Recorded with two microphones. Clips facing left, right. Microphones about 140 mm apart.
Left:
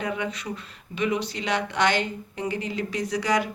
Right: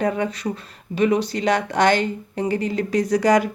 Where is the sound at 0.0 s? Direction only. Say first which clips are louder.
Right 7 dB; 40° right (ahead or behind).